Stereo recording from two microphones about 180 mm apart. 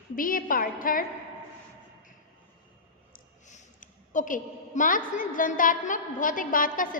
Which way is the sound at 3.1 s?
45° left (ahead or behind).